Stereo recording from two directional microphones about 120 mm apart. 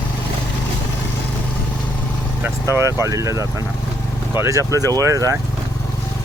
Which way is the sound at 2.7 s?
25° right (ahead or behind).